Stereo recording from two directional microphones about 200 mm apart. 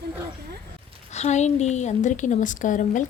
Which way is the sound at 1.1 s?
35° left (ahead or behind).